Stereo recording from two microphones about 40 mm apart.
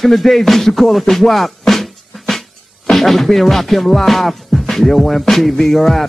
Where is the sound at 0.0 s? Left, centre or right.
Centre.